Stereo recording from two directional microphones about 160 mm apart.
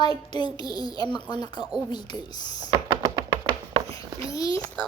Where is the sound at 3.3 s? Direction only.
30° right (ahead or behind).